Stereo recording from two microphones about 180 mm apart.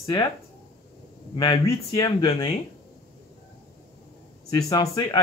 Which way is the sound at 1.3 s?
20° left (ahead or behind).